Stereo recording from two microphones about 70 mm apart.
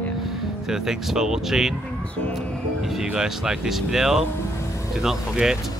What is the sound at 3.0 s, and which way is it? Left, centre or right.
Speech, centre.